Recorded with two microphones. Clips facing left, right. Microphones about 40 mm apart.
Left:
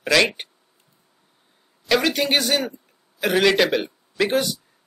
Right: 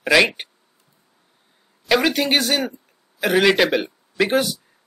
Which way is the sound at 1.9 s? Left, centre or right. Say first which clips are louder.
Right 2 dB; centre.